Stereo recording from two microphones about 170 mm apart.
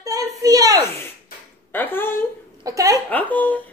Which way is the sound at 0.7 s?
15° left (ahead or behind).